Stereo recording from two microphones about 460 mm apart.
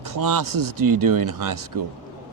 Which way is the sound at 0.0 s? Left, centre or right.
Right.